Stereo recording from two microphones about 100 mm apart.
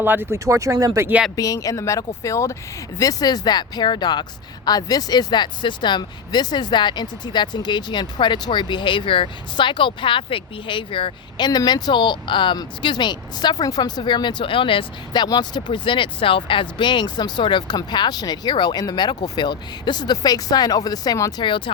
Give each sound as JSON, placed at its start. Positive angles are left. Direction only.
{"t": 0.0, "sound": "speech", "side_deg": -20}
{"t": 0.3, "sound": "speech", "side_deg": -30}
{"t": 1.4, "sound": "speech", "side_deg": 35}
{"t": 21.4, "sound": "speech", "side_deg": 55}